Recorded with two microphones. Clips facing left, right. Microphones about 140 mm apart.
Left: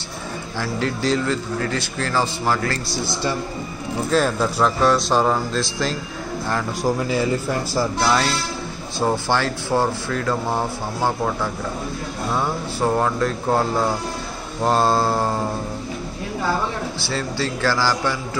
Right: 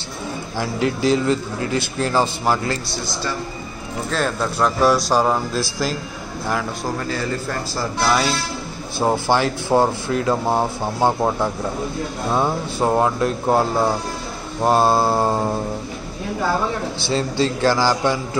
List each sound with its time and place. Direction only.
0.6 s speech: 15° right (ahead or behind)
4.1 s speech: 5° left (ahead or behind)
8.0 s speech: 5° right (ahead or behind)
17.1 s speech: 20° right (ahead or behind)